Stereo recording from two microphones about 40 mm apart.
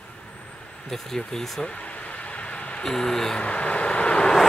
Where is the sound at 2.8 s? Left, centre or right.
Centre.